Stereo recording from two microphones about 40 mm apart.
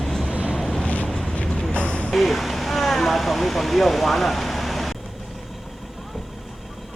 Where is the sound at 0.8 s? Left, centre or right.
Left.